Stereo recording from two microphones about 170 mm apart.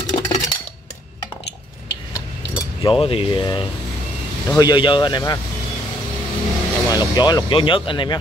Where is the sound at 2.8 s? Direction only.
30° left (ahead or behind).